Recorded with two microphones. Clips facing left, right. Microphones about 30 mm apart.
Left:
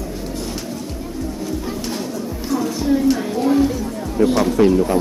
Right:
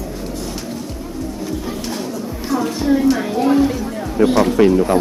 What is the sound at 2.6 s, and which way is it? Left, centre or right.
Music, right.